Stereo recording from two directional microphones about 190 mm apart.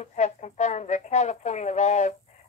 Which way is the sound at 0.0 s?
35° left (ahead or behind).